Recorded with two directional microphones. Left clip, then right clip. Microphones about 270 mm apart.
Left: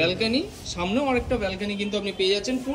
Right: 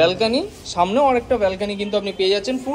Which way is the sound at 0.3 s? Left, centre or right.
Centre.